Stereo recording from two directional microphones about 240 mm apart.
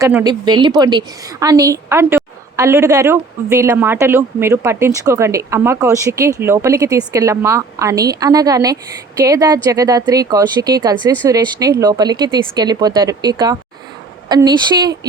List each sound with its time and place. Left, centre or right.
0.0 s a woman's voice: centre